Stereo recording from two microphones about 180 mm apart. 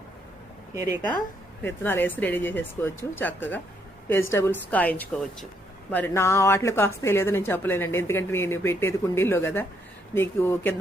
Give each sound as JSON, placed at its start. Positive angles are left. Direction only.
{"t": 0.7, "sound": "a woman's voice", "side_deg": -15}
{"t": 1.6, "sound": "speech", "side_deg": 10}